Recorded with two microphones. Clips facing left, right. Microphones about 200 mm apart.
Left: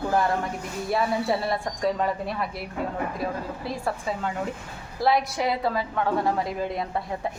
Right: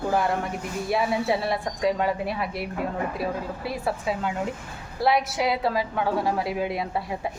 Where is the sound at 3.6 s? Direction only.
5° right (ahead or behind).